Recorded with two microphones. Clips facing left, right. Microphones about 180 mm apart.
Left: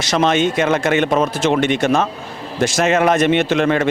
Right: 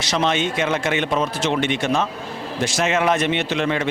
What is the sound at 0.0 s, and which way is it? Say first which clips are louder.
Speech: left 5 dB; 45° left (ahead or behind).